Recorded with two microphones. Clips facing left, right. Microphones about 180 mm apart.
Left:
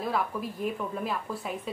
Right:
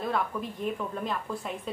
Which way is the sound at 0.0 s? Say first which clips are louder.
Even; 5° left (ahead or behind).